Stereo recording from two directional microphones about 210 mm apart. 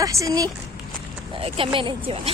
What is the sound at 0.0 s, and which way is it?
Speech, 15° right (ahead or behind).